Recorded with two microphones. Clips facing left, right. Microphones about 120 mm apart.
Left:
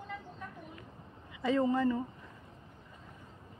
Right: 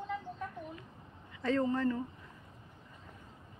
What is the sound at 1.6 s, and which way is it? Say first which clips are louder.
Speech: left 4 dB; 10° left (ahead or behind).